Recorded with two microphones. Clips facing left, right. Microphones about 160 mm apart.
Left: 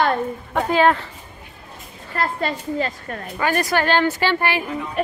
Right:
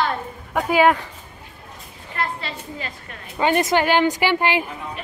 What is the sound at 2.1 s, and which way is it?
A woman's voice, 45° left (ahead or behind).